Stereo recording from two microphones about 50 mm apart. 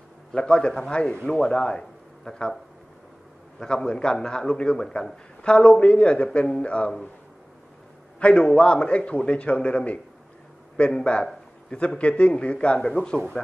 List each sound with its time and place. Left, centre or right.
0.3 s a man's voice: left
3.5 s a man's voice: centre
5.4 s a man's voice: left
8.2 s a man's voice: left
12.0 s a man's voice: left